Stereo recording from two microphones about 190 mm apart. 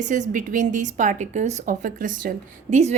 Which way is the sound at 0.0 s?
40° right (ahead or behind).